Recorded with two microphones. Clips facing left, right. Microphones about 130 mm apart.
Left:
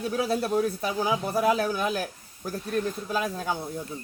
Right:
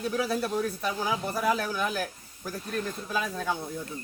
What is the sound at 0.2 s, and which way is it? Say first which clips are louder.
Speech: left 5 dB; 30° left (ahead or behind).